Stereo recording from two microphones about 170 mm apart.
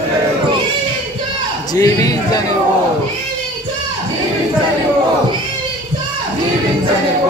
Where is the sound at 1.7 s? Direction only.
20° left (ahead or behind).